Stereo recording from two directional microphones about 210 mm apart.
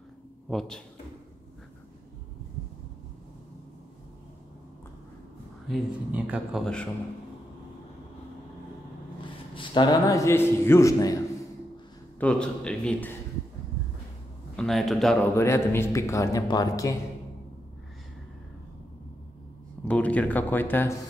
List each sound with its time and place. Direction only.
0.5 s a man's voice: 5° left (ahead or behind)
5.7 s a man's voice: 5° right (ahead or behind)
9.2 s a man's voice: 20° left (ahead or behind)
12.2 s a man's voice: 5° left (ahead or behind)
14.6 s a man's voice: centre (ahead or behind)
15.3 s speech: 15° left (ahead or behind)
19.8 s speech: 5° left (ahead or behind)